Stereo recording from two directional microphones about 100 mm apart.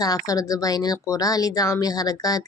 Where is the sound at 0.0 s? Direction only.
35° left (ahead or behind).